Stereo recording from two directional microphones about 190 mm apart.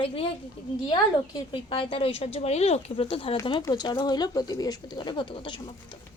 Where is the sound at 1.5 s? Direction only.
25° left (ahead or behind).